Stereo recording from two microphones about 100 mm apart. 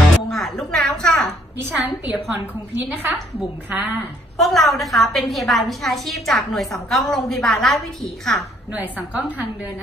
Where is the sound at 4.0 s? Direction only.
Centre (ahead or behind).